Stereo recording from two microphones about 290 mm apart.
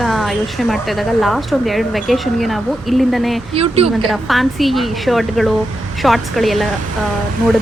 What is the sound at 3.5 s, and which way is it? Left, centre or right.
Speech, centre.